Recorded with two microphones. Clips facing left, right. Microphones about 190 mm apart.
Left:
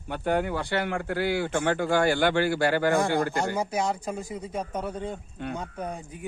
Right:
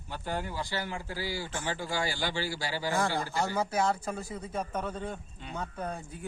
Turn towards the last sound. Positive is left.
turn(degrees=15)  # may be behind; listen again after turning